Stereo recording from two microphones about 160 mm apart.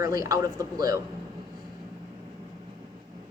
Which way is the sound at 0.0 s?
20° right (ahead or behind).